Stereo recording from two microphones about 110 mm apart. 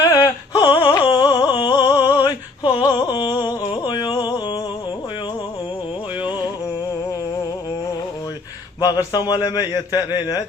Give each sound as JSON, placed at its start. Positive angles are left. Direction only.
{"t": 0.2, "sound": "music", "side_deg": 45}
{"t": 0.9, "sound": "a sound", "side_deg": 40}
{"t": 8.8, "sound": "a man's voice", "side_deg": 35}